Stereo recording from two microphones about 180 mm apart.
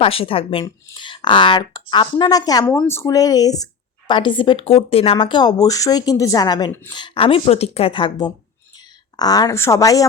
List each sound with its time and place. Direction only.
0.0 s speech: 30° left (ahead or behind)